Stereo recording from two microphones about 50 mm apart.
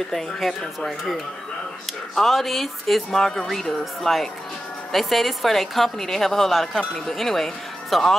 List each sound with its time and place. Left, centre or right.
0.1 s a woman's voice: centre